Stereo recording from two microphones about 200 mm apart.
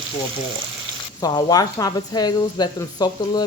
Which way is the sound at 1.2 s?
20° left (ahead or behind).